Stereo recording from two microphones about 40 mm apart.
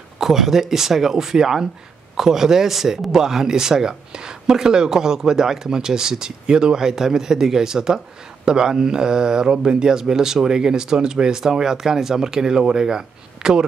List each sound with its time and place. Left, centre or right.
0.2 s speech: centre